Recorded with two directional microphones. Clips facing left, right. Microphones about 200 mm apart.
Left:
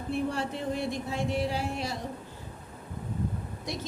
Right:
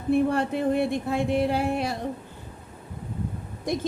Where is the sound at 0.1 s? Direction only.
55° right (ahead or behind).